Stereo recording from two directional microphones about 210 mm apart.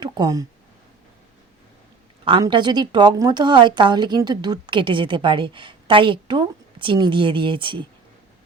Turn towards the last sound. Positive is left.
turn(degrees=-25)  # may be behind; listen again after turning